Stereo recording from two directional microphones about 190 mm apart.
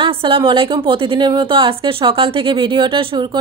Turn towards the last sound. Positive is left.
turn(degrees=-25)  # may be behind; listen again after turning